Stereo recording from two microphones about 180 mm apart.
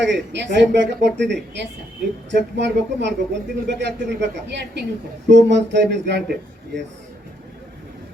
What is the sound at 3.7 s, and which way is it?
A woman's voice, 80° right.